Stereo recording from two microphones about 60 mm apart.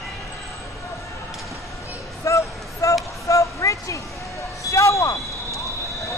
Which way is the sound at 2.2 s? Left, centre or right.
Left.